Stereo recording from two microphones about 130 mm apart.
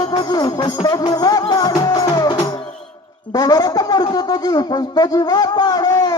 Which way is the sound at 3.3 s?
30° left (ahead or behind).